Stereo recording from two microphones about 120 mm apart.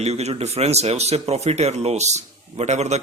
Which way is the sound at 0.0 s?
65° right (ahead or behind).